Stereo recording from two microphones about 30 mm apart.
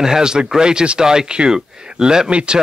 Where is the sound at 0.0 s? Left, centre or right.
Right.